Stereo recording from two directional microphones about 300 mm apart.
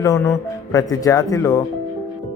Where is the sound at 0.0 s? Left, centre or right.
Centre.